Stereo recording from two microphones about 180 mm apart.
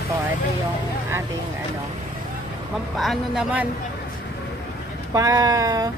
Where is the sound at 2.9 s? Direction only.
Centre (ahead or behind).